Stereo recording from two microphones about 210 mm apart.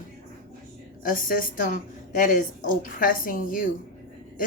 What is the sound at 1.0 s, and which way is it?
Speech, 40° left (ahead or behind).